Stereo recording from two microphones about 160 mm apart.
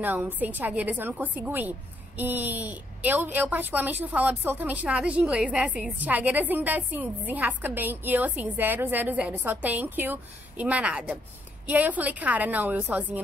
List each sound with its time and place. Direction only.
0.0 s a woman's voice: 10° right (ahead or behind)